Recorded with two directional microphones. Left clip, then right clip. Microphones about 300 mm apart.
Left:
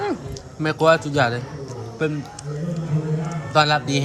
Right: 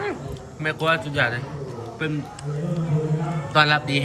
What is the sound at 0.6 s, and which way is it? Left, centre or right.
Speech, centre.